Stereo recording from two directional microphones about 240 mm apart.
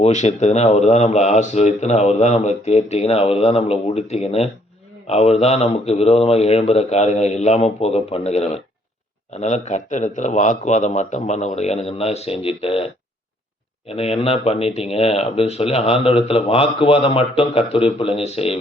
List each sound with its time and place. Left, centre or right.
0.0 s speech: left